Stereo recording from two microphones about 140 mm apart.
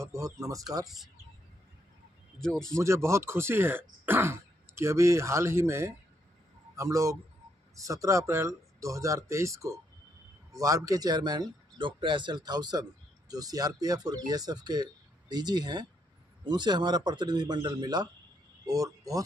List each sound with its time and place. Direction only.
0.0 s speech: 20° right (ahead or behind)
0.8 s speech: centre (ahead or behind)
2.4 s speech: 5° left (ahead or behind)
2.8 s a man's voice: 20° right (ahead or behind)